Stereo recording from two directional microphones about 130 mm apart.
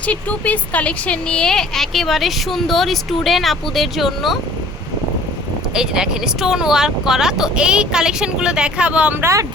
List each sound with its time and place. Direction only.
0.0 s speech: 10° left (ahead or behind)
5.7 s speech: 5° right (ahead or behind)
9.2 s speech: 25° right (ahead or behind)